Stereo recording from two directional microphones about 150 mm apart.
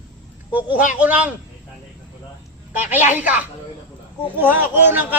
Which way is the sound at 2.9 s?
10° right (ahead or behind).